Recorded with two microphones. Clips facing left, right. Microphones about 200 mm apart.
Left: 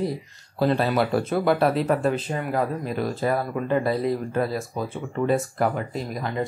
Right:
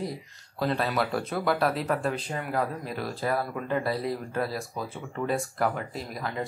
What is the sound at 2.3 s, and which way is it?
Speech, 20° left (ahead or behind).